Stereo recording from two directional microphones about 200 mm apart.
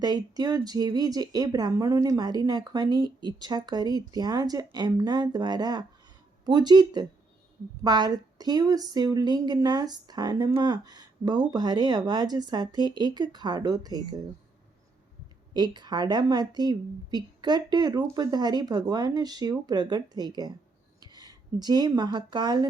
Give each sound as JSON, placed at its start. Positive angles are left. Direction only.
{"t": 0.0, "sound": "a woman's voice", "side_deg": -20}
{"t": 15.5, "sound": "a woman's voice", "side_deg": -20}